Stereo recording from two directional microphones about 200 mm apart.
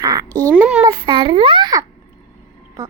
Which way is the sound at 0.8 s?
25° right (ahead or behind).